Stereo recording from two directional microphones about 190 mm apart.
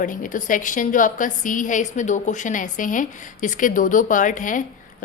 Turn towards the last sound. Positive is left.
turn(degrees=45)  # may be behind; listen again after turning